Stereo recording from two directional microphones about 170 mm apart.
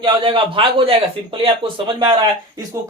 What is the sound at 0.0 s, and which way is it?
A man's voice, 30° right (ahead or behind).